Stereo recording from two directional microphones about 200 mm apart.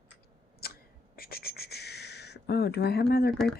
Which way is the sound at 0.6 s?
50° left (ahead or behind).